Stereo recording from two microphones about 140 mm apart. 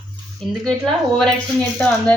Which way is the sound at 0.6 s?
Centre (ahead or behind).